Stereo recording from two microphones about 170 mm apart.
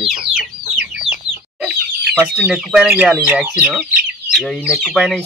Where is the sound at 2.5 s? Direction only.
5° right (ahead or behind).